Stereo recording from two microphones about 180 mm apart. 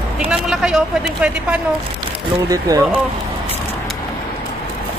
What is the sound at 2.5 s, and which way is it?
Speech, 20° right (ahead or behind).